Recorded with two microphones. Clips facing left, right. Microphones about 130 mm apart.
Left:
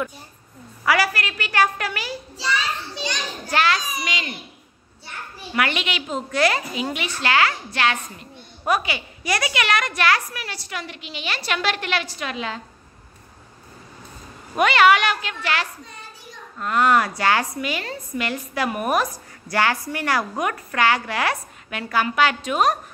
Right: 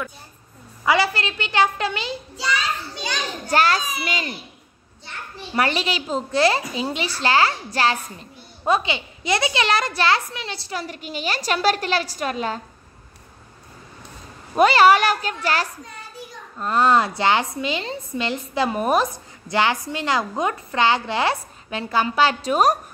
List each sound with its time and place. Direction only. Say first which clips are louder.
0.8 s a woman's voice: right 1 dB; 25° right (ahead or behind)
3.4 s a woman's voice: right 2 dB; 40° right (ahead or behind)
5.5 s a woman's voice: right 2 dB; 35° right (ahead or behind)
14.5 s a woman's voice: right 2 dB; 35° right (ahead or behind)
16.5 s a woman's voice: right 1 dB; 30° right (ahead or behind)